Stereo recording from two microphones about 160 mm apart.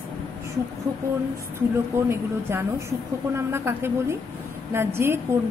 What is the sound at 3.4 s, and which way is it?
Speech, 15° right (ahead or behind).